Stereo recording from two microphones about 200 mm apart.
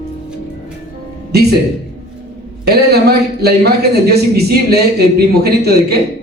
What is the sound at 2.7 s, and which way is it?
Speech, 50° right (ahead or behind).